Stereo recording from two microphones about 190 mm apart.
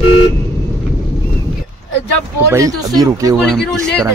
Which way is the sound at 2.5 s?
15° right (ahead or behind).